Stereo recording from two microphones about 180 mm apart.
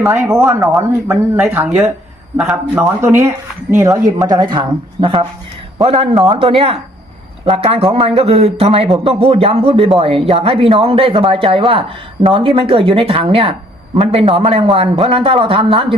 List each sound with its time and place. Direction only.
0.2 s a man's voice: 15° right (ahead or behind); by 16.0 s 30° right (ahead or behind)